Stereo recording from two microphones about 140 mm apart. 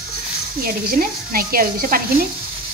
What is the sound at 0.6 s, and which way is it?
Speech, 90° right.